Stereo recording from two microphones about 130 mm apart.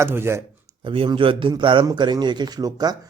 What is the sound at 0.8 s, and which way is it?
Speech, 40° right (ahead or behind).